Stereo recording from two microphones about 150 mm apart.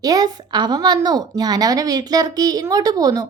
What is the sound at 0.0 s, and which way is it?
A woman's voice, 25° right (ahead or behind).